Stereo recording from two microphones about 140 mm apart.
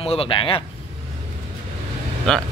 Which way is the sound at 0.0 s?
40° left (ahead or behind).